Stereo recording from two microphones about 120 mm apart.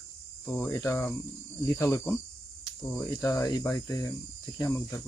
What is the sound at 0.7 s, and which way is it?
Speech, 25° left (ahead or behind).